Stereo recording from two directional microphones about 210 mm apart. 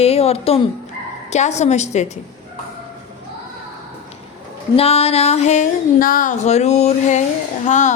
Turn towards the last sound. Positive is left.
turn(degrees=35)  # may be behind; listen again after turning